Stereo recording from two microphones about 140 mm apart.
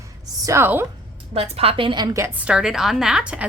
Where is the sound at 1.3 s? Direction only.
45° right (ahead or behind); by 2.3 s 25° right (ahead or behind).